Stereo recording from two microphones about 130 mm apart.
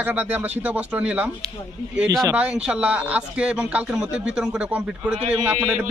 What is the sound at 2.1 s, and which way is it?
Speech, 25° right (ahead or behind).